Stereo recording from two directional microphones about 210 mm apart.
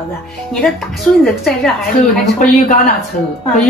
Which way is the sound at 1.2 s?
Centre (ahead or behind).